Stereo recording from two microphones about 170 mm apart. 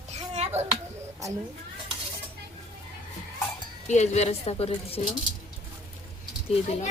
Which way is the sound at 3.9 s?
40° left (ahead or behind).